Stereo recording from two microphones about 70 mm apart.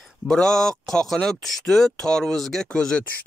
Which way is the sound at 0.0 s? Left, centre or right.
Centre.